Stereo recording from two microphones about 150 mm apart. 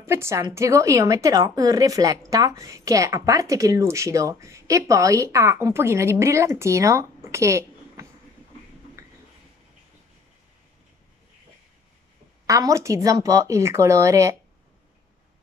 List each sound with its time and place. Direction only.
0.0 s a woman's voice: 20° right (ahead or behind)
9.0 s a sound: 20° right (ahead or behind)
12.4 s a woman's voice: 20° right (ahead or behind)